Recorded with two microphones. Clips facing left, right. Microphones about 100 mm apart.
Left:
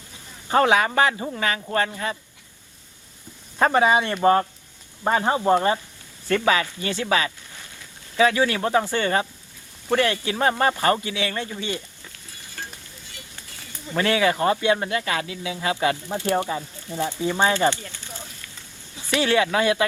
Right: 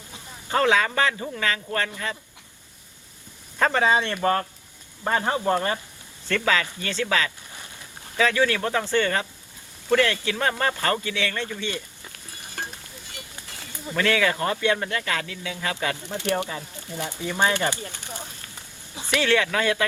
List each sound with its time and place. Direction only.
0.5 s a man's voice: 20° left (ahead or behind)
3.6 s a man's voice: 20° left (ahead or behind)
13.9 s a man's voice: 20° left (ahead or behind)
18.1 s a sound: 15° right (ahead or behind)
19.1 s a man's voice: 20° left (ahead or behind)